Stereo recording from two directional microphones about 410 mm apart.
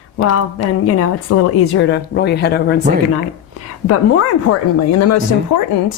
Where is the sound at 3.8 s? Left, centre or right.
Left.